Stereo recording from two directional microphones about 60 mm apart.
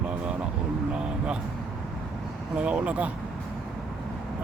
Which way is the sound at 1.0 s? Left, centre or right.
Centre.